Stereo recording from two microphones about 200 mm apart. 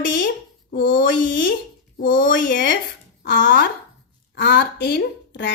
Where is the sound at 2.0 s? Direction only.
45° left (ahead or behind).